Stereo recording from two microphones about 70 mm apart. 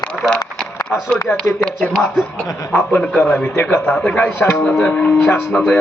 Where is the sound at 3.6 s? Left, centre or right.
Left.